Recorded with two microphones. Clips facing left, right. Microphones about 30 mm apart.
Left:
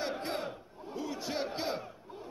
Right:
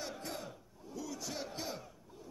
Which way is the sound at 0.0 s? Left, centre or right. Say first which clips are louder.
Left 8 dB; left.